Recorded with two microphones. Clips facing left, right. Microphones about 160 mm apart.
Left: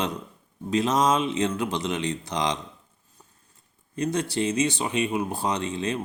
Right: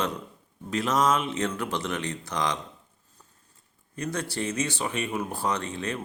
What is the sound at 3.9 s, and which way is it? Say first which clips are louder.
Speech: left 5 dB; 20° left (ahead or behind).